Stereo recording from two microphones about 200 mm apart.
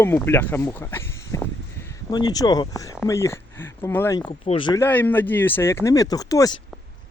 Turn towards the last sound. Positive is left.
turn(degrees=15)  # may be behind; listen again after turning